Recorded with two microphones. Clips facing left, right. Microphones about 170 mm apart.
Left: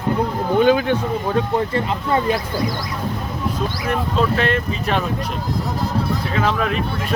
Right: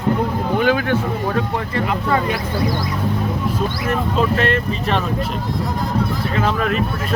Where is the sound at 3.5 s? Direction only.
5° right (ahead or behind).